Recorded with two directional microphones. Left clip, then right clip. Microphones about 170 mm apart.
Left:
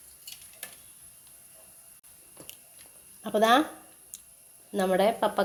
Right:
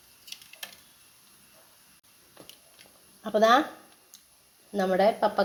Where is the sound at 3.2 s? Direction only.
15° left (ahead or behind).